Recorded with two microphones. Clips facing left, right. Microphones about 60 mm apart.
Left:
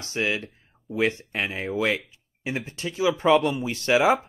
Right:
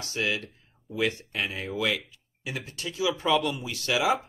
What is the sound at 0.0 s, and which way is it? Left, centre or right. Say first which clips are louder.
Speech: left 3 dB; left.